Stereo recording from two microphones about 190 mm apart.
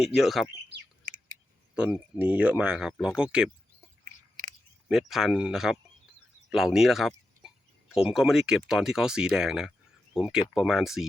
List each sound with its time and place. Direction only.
0.0 s speech: centre (ahead or behind)
1.7 s speech: 5° right (ahead or behind)
4.9 s speech: centre (ahead or behind)